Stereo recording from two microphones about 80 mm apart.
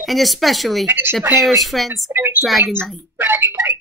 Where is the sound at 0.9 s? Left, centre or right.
Right.